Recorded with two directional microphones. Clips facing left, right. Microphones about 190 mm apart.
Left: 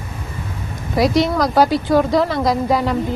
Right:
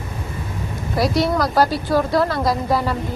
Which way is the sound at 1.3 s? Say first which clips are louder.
Left 2 dB; centre (ahead or behind).